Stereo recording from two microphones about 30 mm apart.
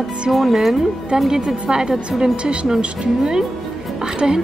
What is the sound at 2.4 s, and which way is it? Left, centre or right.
Speech, right.